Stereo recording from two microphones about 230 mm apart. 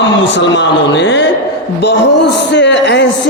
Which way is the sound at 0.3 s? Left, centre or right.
Left.